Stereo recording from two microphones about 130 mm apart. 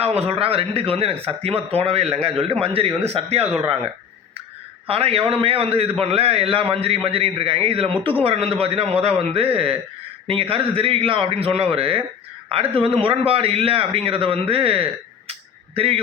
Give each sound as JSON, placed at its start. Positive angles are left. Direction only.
{"t": 0.0, "sound": "a man's voice", "side_deg": -50}
{"t": 4.9, "sound": "a man's voice", "side_deg": -50}
{"t": 15.3, "sound": "a sound", "side_deg": -45}